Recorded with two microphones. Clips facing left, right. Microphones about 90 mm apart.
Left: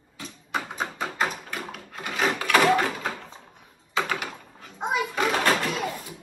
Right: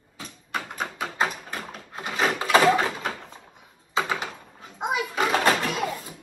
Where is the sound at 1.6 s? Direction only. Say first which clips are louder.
Right 1 dB; 30° right (ahead or behind).